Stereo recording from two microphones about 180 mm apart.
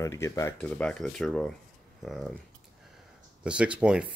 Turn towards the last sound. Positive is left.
turn(degrees=-5)  # may be behind; listen again after turning